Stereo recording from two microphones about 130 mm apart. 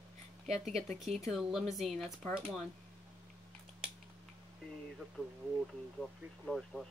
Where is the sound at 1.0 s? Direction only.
Centre (ahead or behind).